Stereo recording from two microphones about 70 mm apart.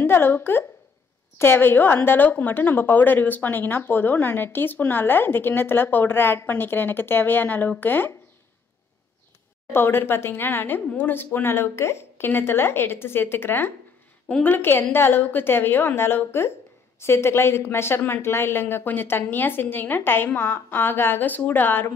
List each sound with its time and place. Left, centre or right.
0.0 s a woman's voice: left
9.7 s a woman's voice: left